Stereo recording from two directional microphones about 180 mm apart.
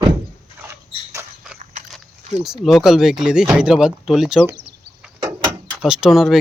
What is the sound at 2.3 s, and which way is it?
Speech, 5° right (ahead or behind).